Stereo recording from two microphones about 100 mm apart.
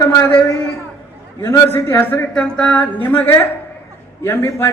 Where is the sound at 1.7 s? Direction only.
25° left (ahead or behind).